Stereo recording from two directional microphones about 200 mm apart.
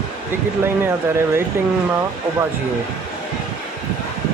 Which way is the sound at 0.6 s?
10° right (ahead or behind).